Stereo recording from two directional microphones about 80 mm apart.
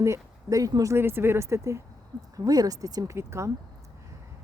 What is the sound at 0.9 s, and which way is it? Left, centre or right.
Speech, right.